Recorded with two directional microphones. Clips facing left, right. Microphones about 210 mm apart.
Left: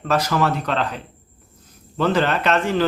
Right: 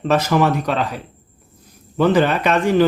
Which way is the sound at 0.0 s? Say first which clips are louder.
Right 4 dB; 20° right (ahead or behind).